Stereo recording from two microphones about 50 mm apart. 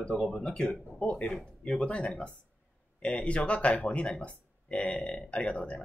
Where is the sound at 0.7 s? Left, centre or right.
Left.